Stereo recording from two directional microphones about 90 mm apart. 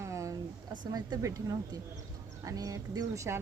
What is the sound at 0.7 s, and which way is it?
Speech, 45° right (ahead or behind).